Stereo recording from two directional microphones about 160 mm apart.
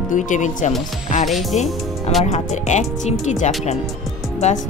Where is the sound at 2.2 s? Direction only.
45° left (ahead or behind).